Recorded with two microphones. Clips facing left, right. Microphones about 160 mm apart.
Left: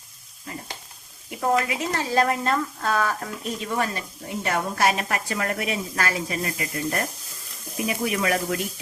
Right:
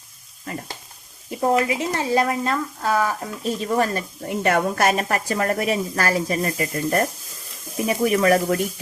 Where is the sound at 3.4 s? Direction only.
35° right (ahead or behind).